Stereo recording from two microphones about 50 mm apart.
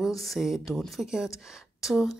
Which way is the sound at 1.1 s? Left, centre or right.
Centre.